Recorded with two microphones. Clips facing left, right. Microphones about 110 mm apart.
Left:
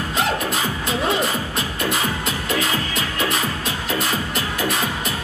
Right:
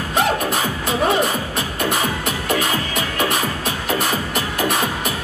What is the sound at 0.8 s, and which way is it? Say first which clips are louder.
Music: right 4 dB; 55° right (ahead or behind).